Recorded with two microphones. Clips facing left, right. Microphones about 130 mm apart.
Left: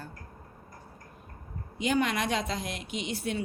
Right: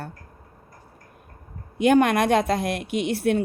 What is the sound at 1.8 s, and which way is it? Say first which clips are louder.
Speech: right 10 dB; 55° right (ahead or behind).